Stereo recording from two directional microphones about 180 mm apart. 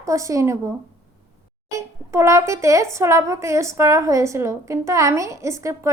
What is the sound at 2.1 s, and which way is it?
A woman's voice, 15° right (ahead or behind).